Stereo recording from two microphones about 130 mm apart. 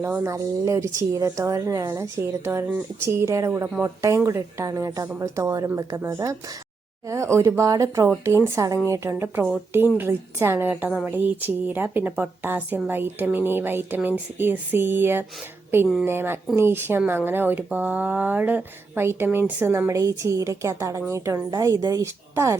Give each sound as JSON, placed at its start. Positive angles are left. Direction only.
{"t": 0.0, "sound": "a woman's voice", "side_deg": -20}